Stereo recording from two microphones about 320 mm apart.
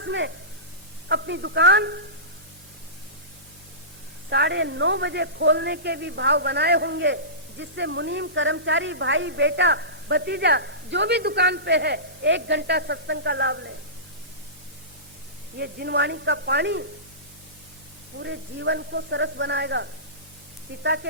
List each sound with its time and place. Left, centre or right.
0.0 s a woman's voice: right
4.3 s a woman's voice: right
15.5 s a woman's voice: right
18.2 s a woman's voice: right